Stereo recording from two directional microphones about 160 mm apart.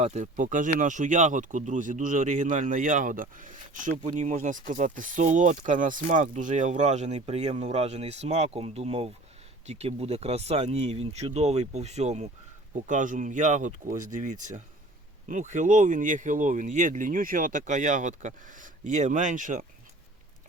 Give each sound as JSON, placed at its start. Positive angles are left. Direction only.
{"t": 0.0, "sound": "speech", "side_deg": -45}